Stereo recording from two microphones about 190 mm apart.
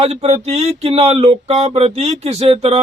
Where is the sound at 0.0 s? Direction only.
35° right (ahead or behind).